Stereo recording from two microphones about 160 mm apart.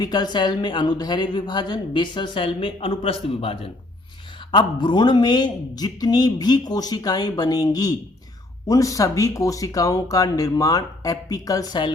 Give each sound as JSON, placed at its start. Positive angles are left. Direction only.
{"t": 0.0, "sound": "speech", "side_deg": 25}